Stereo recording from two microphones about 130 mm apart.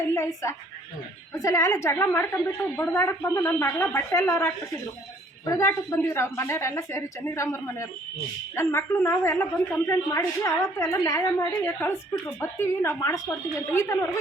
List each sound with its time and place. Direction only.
0.0 s a woman's voice: 20° left (ahead or behind)